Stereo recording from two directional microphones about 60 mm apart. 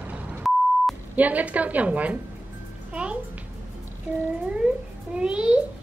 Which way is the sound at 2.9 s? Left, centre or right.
Right.